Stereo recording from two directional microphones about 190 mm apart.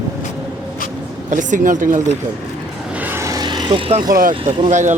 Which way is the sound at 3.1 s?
15° right (ahead or behind).